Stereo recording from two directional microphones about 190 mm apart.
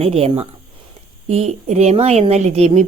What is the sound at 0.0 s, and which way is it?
A woman's voice, 30° right (ahead or behind).